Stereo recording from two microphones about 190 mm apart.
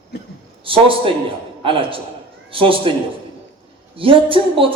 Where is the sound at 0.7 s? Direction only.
25° right (ahead or behind).